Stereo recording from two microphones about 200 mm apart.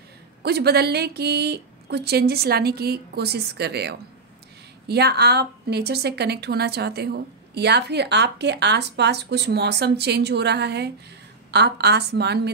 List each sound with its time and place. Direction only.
0.4 s a woman's voice: 55° right (ahead or behind)